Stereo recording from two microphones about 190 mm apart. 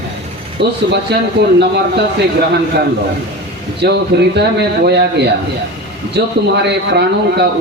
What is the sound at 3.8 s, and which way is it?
A man's voice, 60° right (ahead or behind).